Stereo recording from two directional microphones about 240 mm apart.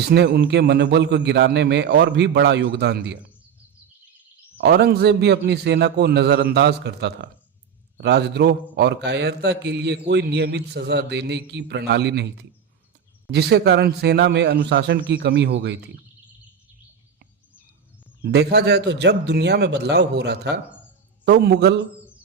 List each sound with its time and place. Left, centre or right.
0.1 s a man's voice: right
4.5 s a man's voice: right
18.2 s a man's voice: right